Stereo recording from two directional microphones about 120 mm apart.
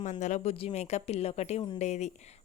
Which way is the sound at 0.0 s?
85° left.